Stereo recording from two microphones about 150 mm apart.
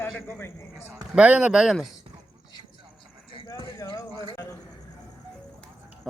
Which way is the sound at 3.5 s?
20° left (ahead or behind).